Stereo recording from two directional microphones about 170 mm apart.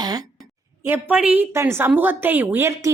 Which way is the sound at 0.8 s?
10° right (ahead or behind).